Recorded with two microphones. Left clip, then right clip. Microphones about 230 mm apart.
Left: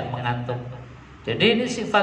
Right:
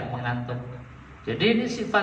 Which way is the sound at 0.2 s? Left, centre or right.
Left.